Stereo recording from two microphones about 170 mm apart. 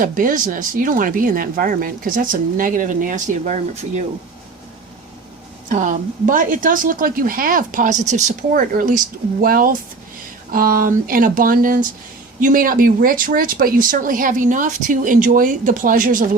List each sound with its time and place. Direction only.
0.0 s speech: 50° right (ahead or behind)
5.6 s speech: 50° right (ahead or behind)